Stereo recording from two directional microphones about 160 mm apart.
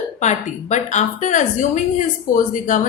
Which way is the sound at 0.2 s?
45° left (ahead or behind).